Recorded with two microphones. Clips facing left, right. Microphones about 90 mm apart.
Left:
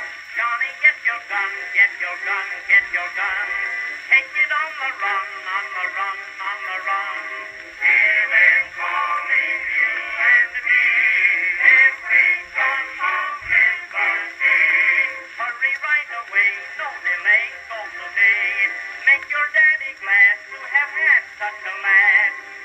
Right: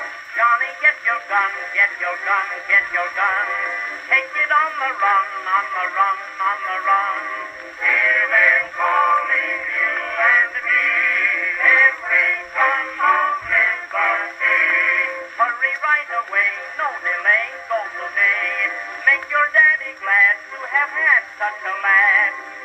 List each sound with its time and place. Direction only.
0.4 s music: 30° right (ahead or behind)
7.8 s synthetic singing: 30° right (ahead or behind)
20.1 s music: 30° right (ahead or behind)